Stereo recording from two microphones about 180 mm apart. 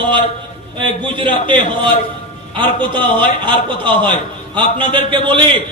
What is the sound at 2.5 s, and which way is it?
Speech, 25° right (ahead or behind).